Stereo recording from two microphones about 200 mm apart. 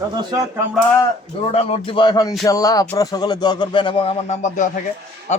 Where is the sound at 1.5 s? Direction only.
25° left (ahead or behind).